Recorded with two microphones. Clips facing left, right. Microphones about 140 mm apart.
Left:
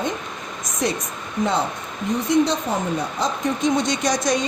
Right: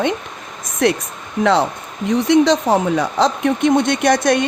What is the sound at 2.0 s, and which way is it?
Speech, 80° right.